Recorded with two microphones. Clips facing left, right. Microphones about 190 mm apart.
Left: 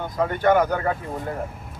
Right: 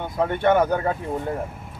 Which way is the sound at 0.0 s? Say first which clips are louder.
Even; 25° right (ahead or behind).